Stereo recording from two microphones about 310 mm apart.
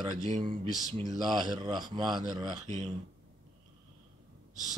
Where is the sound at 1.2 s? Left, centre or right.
Centre.